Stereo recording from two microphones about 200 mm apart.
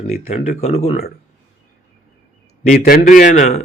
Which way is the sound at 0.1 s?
30° left (ahead or behind).